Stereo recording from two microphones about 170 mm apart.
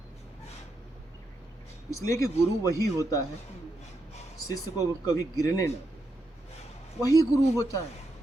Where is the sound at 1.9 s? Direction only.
15° left (ahead or behind).